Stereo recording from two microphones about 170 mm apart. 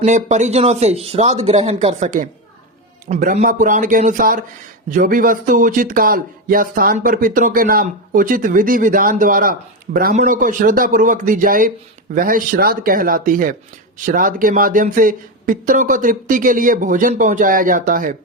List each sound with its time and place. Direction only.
0.0 s speech: 45° right (ahead or behind)